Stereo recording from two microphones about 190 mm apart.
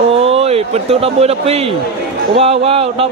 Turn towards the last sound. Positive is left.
turn(degrees=-30)  # may be behind; listen again after turning